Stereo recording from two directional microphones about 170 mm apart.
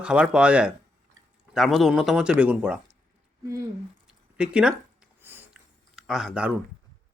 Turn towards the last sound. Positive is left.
turn(degrees=-5)  # may be behind; listen again after turning